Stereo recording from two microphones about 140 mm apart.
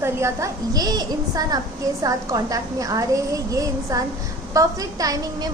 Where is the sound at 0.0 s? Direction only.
20° right (ahead or behind).